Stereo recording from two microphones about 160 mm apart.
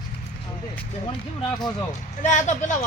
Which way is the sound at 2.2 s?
50° left (ahead or behind).